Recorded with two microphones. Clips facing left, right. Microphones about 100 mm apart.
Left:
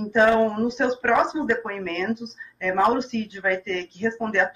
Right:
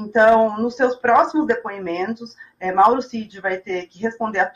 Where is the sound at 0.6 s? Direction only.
30° right (ahead or behind).